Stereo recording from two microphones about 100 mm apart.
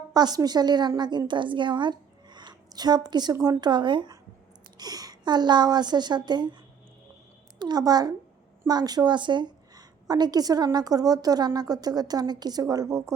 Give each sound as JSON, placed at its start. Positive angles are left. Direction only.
{"t": 0.1, "sound": "a woman's voice", "side_deg": -40}
{"t": 4.8, "sound": "a woman's voice", "side_deg": -40}
{"t": 7.6, "sound": "a woman's voice", "side_deg": -45}